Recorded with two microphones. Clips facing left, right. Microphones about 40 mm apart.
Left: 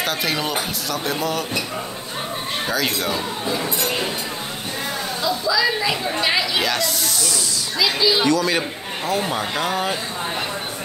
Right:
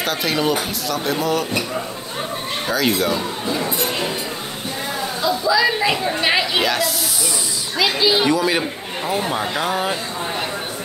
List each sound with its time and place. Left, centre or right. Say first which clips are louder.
0.0 s speech: right 3 dB; centre
2.7 s speech: right 5 dB; centre
5.2 s a woman's voice: right 3 dB; centre
6.6 s speech: right 2 dB; centre
7.8 s a woman's voice: right 1 dB; centre